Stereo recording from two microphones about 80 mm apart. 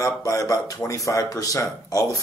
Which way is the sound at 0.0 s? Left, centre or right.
Left.